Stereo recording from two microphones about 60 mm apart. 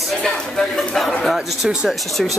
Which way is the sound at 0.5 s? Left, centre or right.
Centre.